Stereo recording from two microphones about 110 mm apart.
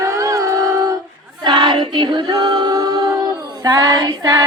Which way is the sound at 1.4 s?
45° right (ahead or behind).